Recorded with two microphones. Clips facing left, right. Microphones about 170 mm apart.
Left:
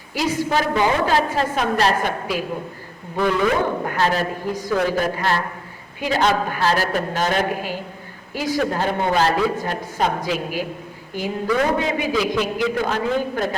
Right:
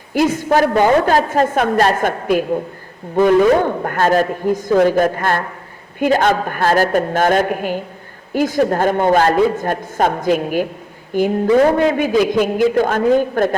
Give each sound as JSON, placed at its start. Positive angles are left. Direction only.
{"t": 0.1, "sound": "a man's voice", "side_deg": -50}